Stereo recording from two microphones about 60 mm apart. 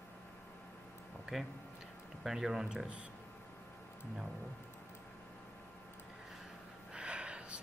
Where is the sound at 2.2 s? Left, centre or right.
Centre.